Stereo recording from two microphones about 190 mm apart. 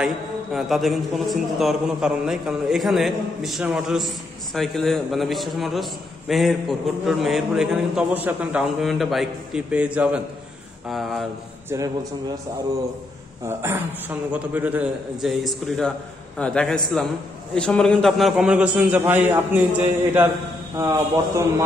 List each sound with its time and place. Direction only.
0.0 s a man's voice: centre (ahead or behind)
11.7 s a man's voice: 20° right (ahead or behind)
13.5 s a man's voice: 15° right (ahead or behind)
20.7 s a man's voice: 15° right (ahead or behind)